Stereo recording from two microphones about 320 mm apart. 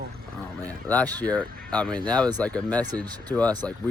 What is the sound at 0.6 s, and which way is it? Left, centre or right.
Speech, centre.